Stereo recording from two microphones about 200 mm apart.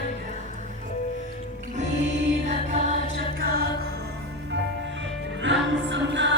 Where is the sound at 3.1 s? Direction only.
50° right (ahead or behind).